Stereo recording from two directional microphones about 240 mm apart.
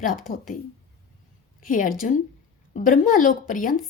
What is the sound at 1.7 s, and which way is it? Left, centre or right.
Speech, left.